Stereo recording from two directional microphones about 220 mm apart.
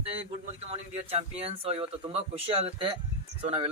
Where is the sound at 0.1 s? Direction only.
25° right (ahead or behind).